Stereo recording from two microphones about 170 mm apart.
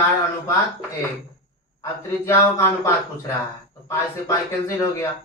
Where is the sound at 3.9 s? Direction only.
15° left (ahead or behind).